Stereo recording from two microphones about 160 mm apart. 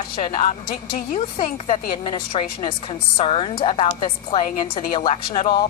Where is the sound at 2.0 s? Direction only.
35° left (ahead or behind).